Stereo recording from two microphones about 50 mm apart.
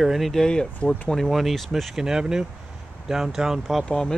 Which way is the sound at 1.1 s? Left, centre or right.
Centre.